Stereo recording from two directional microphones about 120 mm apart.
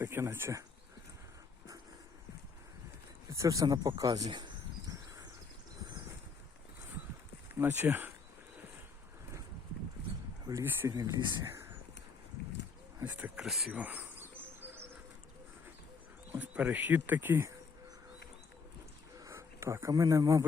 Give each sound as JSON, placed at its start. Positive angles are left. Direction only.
{"t": 0.0, "sound": "speech", "side_deg": -20}
{"t": 3.2, "sound": "speech", "side_deg": -25}
{"t": 7.6, "sound": "speech", "side_deg": -20}
{"t": 10.4, "sound": "speech", "side_deg": -25}
{"t": 10.9, "sound": "speech", "side_deg": -35}
{"t": 11.4, "sound": "a sound", "side_deg": -20}
{"t": 13.1, "sound": "speech", "side_deg": -10}
{"t": 13.8, "sound": "insect", "side_deg": -15}
{"t": 16.3, "sound": "speech", "side_deg": -15}
{"t": 19.1, "sound": "a sound", "side_deg": -25}